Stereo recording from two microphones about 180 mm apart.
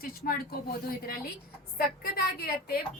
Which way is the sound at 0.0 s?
55° left (ahead or behind).